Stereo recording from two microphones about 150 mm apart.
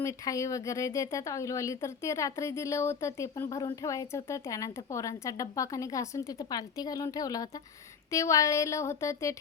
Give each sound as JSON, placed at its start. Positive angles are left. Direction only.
{"t": 0.0, "sound": "speech", "side_deg": 20}